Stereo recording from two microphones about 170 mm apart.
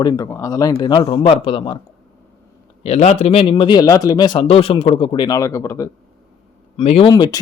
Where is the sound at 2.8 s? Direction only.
40° left (ahead or behind); by 5.9 s 20° left (ahead or behind).